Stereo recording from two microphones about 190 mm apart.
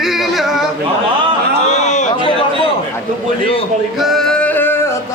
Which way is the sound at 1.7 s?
40° left (ahead or behind).